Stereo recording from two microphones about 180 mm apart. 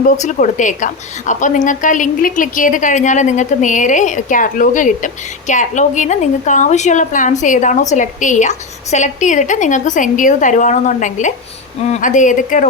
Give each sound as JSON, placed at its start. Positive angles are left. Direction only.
{"t": 0.2, "sound": "a woman's voice", "side_deg": 45}